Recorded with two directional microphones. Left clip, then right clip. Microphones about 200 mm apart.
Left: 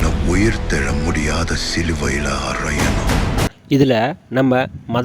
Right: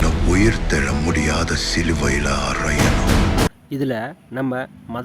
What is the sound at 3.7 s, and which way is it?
Speech, 35° left (ahead or behind).